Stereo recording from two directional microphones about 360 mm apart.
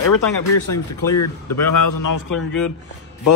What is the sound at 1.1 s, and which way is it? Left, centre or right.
A man's voice, left.